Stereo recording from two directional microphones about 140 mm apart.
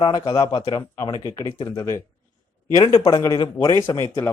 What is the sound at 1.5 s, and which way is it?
Speech, 30° left (ahead or behind).